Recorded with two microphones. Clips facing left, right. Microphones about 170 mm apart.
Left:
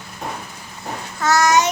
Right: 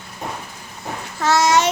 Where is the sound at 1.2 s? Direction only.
30° right (ahead or behind).